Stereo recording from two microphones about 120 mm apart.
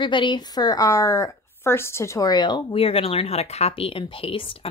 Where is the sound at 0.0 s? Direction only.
40° left (ahead or behind).